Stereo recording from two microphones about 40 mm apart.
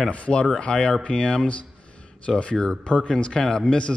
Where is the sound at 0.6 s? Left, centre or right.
Left.